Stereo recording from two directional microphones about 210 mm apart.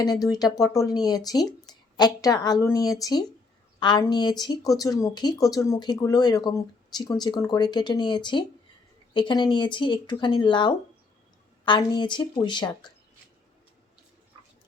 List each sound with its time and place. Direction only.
0.3 s speech: 20° left (ahead or behind)